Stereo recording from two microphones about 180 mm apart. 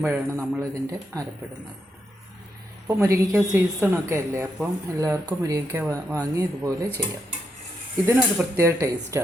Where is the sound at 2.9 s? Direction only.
15° right (ahead or behind).